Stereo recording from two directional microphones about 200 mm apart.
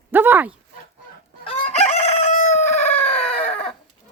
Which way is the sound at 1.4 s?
30° left (ahead or behind).